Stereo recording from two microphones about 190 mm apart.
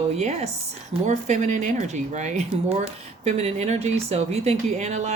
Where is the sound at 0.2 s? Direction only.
35° right (ahead or behind).